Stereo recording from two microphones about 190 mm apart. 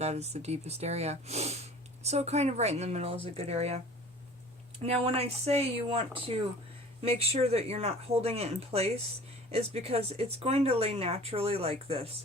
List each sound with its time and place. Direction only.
0.0 s speech: 35° right (ahead or behind)
4.8 s speech: 30° right (ahead or behind)